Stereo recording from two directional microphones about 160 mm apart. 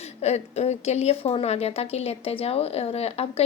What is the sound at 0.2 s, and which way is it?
Speech, 40° left (ahead or behind).